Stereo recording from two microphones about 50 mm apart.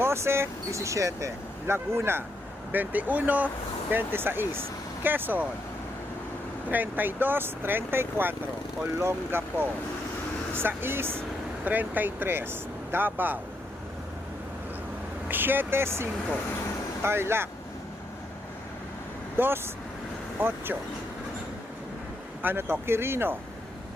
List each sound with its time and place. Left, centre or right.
0.0 s speech: right
1.7 s speech: right
2.7 s speech: right
3.9 s speech: right
6.7 s speech: right
11.6 s speech: right
15.3 s speech: right
19.4 s speech: right
20.4 s speech: right
22.4 s speech: right